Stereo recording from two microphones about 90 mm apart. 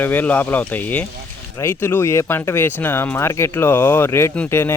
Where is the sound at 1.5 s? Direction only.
30° left (ahead or behind).